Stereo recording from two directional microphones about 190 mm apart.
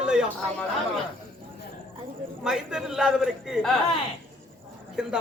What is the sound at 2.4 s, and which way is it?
A man's voice, 5° right (ahead or behind).